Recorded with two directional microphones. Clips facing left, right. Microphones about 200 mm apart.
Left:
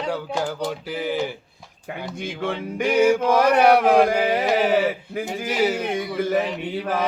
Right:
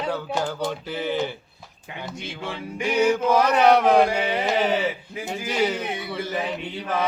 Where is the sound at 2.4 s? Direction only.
55° left (ahead or behind).